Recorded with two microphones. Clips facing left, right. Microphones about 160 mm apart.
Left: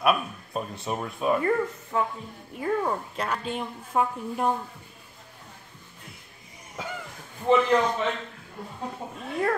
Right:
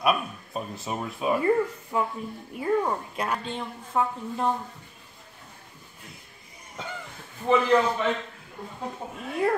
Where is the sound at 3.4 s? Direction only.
10° left (ahead or behind).